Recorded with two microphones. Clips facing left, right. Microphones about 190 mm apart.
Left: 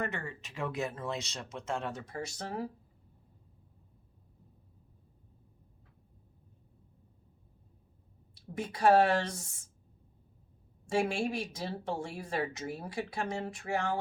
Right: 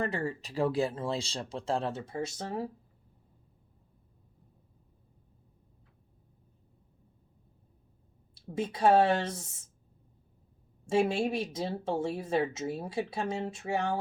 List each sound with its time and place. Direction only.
0.0 s speech: 35° right (ahead or behind)
8.5 s speech: 25° right (ahead or behind)
10.8 s speech: 20° right (ahead or behind)